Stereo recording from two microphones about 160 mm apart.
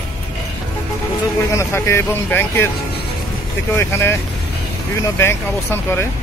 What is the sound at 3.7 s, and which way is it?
Speech, 15° left (ahead or behind).